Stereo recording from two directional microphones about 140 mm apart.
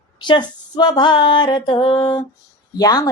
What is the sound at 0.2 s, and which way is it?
A woman's voice, 35° left (ahead or behind).